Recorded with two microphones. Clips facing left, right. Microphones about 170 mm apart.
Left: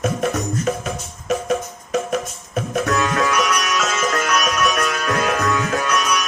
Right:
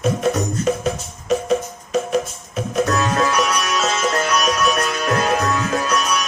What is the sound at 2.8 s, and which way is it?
Music, 35° right (ahead or behind).